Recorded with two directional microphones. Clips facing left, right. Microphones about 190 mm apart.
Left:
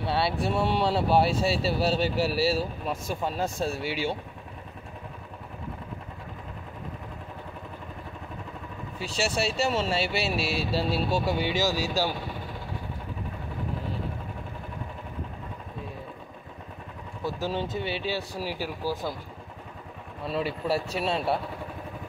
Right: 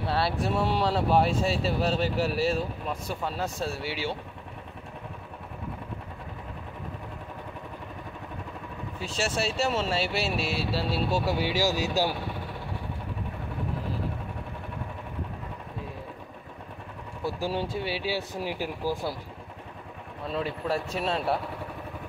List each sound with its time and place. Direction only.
0.0 s speech: centre (ahead or behind)
9.0 s speech: centre (ahead or behind); by 12.2 s 15° right (ahead or behind)
17.4 s speech: 10° right (ahead or behind)
20.2 s speech: 5° left (ahead or behind)